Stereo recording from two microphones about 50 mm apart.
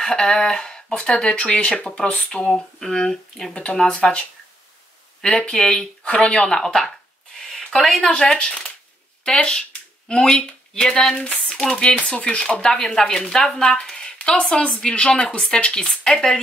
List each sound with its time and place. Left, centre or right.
0.0 s speech: centre
5.5 s speech: centre
13.8 s a sound: centre
14.3 s speech: left